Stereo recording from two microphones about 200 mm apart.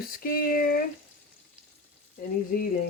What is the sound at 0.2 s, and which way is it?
Speech, 45° left (ahead or behind).